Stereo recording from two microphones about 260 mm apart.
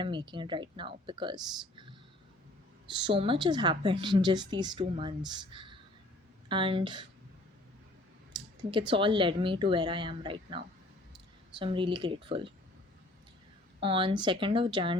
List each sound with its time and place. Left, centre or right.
0.0 s speech: centre
8.3 s a sound: centre
8.9 s speech: centre
13.8 s speech: centre